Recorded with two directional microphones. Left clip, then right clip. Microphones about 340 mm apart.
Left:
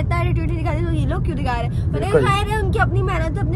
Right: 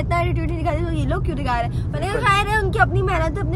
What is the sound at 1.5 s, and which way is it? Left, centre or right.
A woman's voice, centre.